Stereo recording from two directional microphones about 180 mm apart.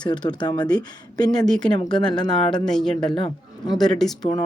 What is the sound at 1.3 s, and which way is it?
Speech, 5° left (ahead or behind).